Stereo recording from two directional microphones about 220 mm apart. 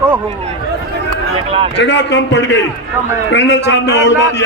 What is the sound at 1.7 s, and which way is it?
A man's voice, 50° left (ahead or behind).